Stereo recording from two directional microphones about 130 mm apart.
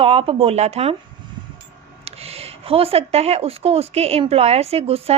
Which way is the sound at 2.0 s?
50° right (ahead or behind).